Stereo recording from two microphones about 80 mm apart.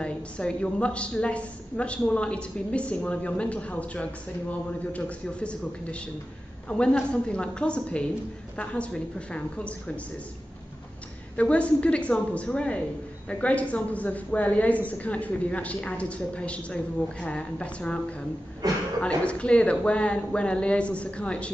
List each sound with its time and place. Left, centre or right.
0.0 s a woman's voice: centre
11.3 s a woman's voice: centre
18.6 s a sound: right
18.9 s a woman's voice: centre